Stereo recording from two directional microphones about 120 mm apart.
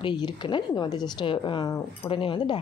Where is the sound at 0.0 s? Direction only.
40° left (ahead or behind).